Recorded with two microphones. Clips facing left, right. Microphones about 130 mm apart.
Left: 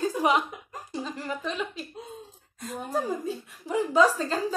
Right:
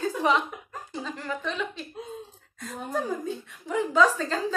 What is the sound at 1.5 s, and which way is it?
Speech, 10° left (ahead or behind).